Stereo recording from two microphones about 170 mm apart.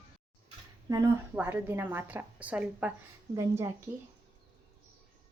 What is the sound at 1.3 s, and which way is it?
A woman's voice, 10° right (ahead or behind).